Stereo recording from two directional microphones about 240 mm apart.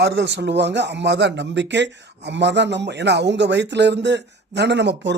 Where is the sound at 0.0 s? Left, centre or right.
Right.